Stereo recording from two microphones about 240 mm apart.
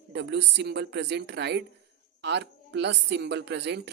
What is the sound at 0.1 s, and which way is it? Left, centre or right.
Speech, right.